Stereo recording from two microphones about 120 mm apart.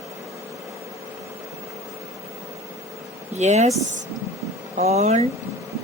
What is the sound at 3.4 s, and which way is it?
Speech, 70° right (ahead or behind).